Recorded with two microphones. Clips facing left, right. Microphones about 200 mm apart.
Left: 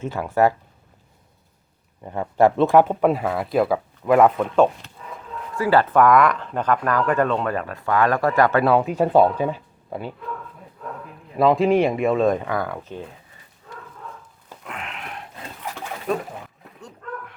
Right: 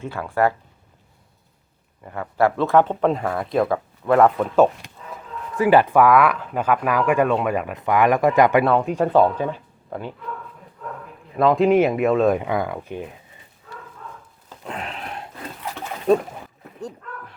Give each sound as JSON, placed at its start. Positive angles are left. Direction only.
{"t": 0.0, "sound": "speech", "side_deg": 20}
{"t": 2.0, "sound": "speech", "side_deg": 20}
{"t": 4.4, "sound": "speech", "side_deg": -5}
{"t": 5.5, "sound": "speech", "side_deg": -20}
{"t": 8.6, "sound": "speech", "side_deg": 0}
{"t": 11.3, "sound": "speech", "side_deg": 0}
{"t": 12.4, "sound": "speech", "side_deg": -15}
{"t": 14.6, "sound": "a sound", "side_deg": -30}
{"t": 16.1, "sound": "speech", "side_deg": -30}